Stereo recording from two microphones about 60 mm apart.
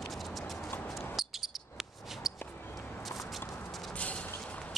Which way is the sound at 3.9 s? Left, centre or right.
Left.